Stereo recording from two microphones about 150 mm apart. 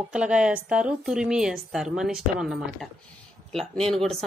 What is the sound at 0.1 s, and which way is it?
A woman's voice, 5° right (ahead or behind).